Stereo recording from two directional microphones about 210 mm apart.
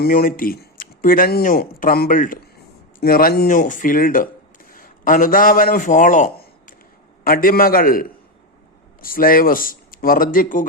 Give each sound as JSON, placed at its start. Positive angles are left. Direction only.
{"t": 0.0, "sound": "a man's voice", "side_deg": 40}